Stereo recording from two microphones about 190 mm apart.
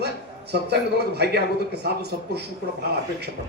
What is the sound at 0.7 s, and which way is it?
A man's voice, 60° right (ahead or behind).